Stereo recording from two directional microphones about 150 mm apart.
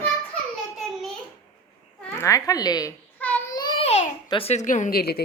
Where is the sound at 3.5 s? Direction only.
30° left (ahead or behind).